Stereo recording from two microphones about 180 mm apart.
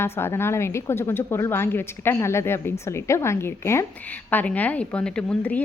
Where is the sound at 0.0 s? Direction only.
15° left (ahead or behind).